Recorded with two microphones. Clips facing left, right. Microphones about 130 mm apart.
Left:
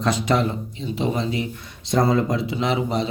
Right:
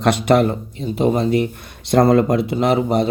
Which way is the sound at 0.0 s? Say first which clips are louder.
Right 6 dB; 60° right (ahead or behind).